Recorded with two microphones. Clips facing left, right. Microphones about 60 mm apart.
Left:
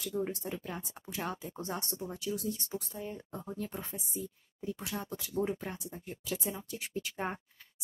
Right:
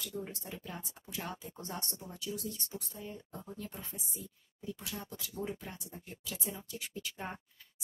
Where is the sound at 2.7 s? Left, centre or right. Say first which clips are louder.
Left 5 dB; left.